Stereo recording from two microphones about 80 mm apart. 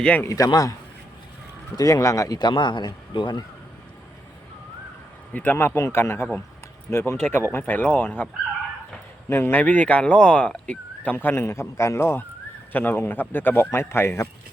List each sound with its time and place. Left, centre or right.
0.3 s speech: left
2.4 s speech: left
5.3 s speech: left
7.6 s speech: centre
9.3 s speech: left